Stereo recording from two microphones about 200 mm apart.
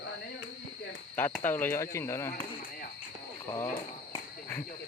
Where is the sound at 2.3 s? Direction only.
45° left (ahead or behind).